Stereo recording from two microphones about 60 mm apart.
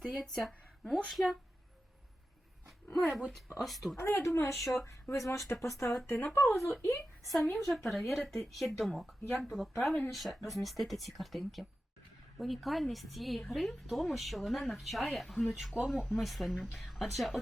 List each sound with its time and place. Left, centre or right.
0.0 s speech: centre
2.6 s speech: centre
4.0 s speech: left
4.5 s speech: centre
5.1 s speech: left
6.0 s speech: left
6.3 s speech: left
6.8 s a woman's voice: left
7.3 s speech: centre